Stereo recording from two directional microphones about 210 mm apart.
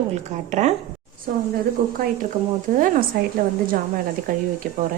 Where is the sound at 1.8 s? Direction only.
45° right (ahead or behind).